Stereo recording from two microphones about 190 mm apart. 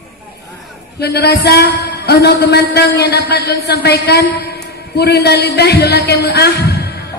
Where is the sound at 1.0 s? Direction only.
55° left (ahead or behind).